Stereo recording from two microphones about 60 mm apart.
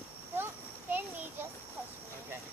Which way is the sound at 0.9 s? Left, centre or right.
Right.